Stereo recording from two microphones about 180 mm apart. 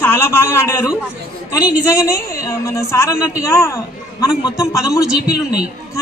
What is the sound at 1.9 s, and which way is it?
A woman's voice, 15° left (ahead or behind).